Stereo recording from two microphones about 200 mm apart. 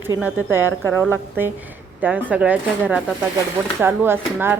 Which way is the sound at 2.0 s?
10° right (ahead or behind).